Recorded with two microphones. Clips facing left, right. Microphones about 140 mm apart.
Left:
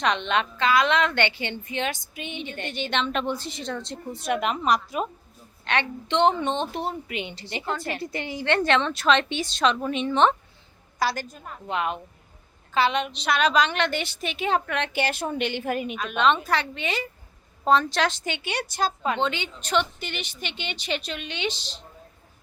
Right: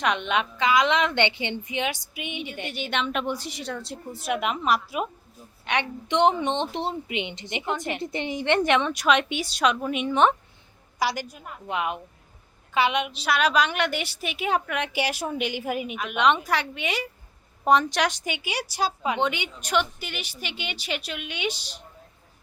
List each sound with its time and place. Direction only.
0.0 s a woman's voice: 10° right (ahead or behind)